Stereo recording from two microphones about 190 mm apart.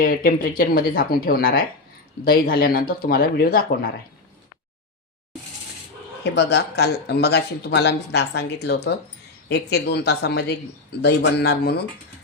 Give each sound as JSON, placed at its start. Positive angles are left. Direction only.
{"t": 0.0, "sound": "speech", "side_deg": 50}
{"t": 6.3, "sound": "speech", "side_deg": 60}